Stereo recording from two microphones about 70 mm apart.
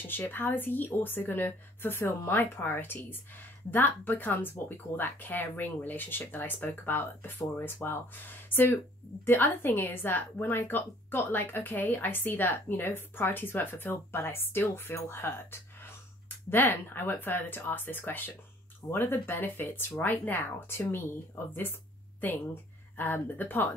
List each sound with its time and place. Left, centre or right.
0.1 s a woman's voice: left